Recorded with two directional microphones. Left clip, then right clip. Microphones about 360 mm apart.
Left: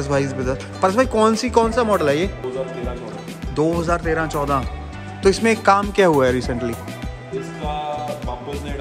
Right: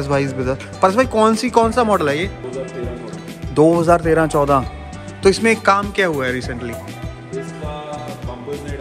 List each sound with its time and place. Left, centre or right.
0.0 s speech: centre
3.5 s speech: centre